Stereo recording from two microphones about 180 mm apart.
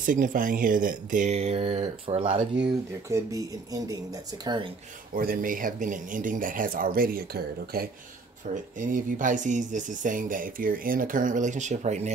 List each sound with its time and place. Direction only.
0.0 s speech: 50° right (ahead or behind); by 2.4 s 30° right (ahead or behind)
2.6 s speech: 20° right (ahead or behind)
5.1 s speech: 55° right (ahead or behind)
8.7 s speech: 45° right (ahead or behind)